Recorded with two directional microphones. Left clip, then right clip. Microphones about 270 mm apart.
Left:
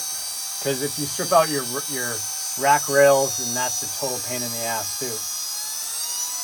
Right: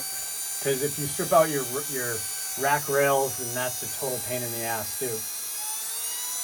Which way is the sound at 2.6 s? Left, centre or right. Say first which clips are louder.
Left 7 dB; left.